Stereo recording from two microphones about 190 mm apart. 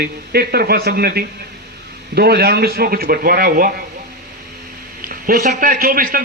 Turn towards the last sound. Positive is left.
turn(degrees=-50)  # may be behind; listen again after turning